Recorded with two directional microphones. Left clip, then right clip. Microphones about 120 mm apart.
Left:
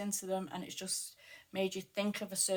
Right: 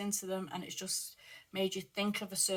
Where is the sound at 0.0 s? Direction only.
30° left (ahead or behind).